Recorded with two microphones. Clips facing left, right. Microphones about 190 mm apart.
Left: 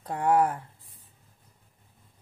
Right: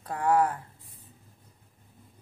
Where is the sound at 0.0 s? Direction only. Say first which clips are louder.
Left 1 dB; 25° left (ahead or behind).